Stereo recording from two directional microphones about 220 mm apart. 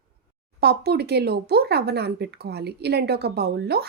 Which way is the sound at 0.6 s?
45° right (ahead or behind).